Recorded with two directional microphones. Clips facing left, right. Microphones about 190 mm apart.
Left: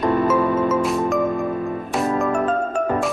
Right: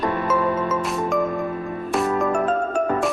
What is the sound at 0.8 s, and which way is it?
Music, centre (ahead or behind).